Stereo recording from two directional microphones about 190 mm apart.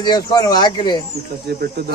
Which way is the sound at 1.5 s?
60° right (ahead or behind).